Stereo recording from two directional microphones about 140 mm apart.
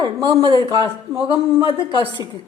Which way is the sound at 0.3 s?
40° right (ahead or behind).